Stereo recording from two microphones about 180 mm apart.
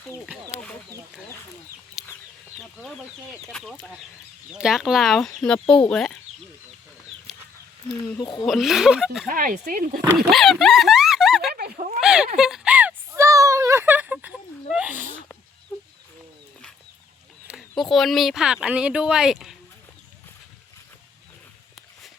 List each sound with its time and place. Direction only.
0.3 s a sound: centre (ahead or behind)
2.0 s chicken: 5° right (ahead or behind)
3.5 s speech: 5° left (ahead or behind)
8.2 s speech: 25° left (ahead or behind)
8.4 s speech: centre (ahead or behind)
9.2 s speech: 50° right (ahead or behind)
10.2 s dog: centre (ahead or behind)
11.5 s a sound: 55° right (ahead or behind)
11.9 s a sound: 5° right (ahead or behind)
17.5 s speech: centre (ahead or behind)